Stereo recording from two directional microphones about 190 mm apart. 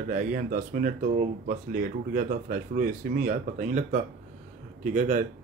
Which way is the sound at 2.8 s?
40° right (ahead or behind).